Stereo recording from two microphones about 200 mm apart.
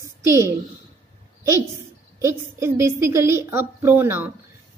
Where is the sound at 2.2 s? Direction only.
15° right (ahead or behind).